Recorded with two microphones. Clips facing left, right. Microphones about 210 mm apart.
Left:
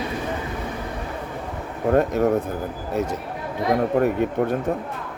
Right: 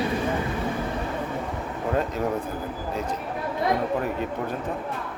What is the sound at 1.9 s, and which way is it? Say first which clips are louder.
Speech: left 7 dB; 60° left (ahead or behind).